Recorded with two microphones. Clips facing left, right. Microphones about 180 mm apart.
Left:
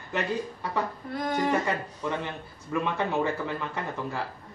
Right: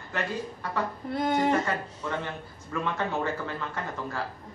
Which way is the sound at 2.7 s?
15° left (ahead or behind).